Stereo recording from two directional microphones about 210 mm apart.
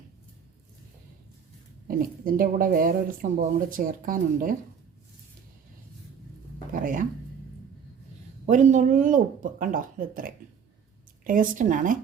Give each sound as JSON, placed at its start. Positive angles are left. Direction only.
{"t": 1.9, "sound": "speech", "side_deg": -45}
{"t": 6.7, "sound": "music", "side_deg": -40}
{"t": 8.4, "sound": "speech", "side_deg": -35}